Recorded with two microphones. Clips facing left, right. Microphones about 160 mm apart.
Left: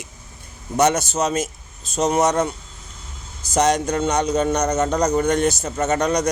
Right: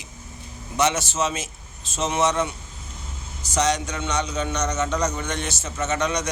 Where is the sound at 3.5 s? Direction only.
50° left (ahead or behind).